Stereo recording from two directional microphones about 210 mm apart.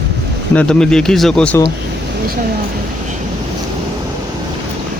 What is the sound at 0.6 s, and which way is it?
Speech, 5° left (ahead or behind).